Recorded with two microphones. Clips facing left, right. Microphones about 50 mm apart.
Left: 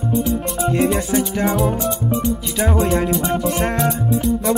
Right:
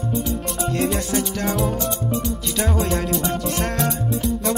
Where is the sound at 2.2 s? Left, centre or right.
Centre.